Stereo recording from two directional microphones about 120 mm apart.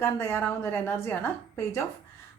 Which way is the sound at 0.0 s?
20° left (ahead or behind).